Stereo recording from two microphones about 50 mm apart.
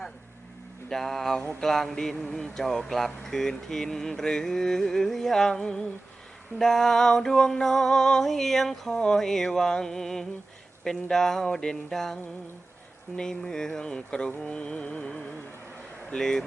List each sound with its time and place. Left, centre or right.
0.9 s speech: centre